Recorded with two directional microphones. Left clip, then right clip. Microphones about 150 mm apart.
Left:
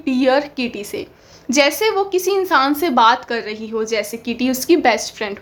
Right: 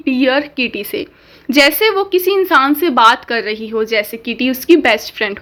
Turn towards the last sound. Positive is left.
turn(degrees=-20)  # may be behind; listen again after turning